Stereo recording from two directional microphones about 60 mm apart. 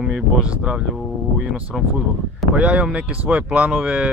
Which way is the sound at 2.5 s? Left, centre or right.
Right.